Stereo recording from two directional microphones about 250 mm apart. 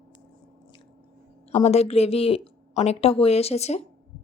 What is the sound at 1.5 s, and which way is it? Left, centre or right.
A woman's voice, left.